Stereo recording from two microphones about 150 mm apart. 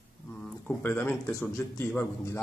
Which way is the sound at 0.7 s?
15° left (ahead or behind).